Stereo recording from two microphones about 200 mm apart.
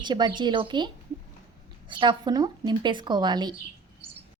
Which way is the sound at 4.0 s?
30° right (ahead or behind).